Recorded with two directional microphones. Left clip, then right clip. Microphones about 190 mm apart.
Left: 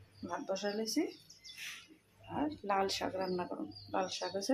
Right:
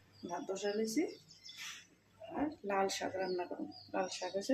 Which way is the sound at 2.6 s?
5° left (ahead or behind).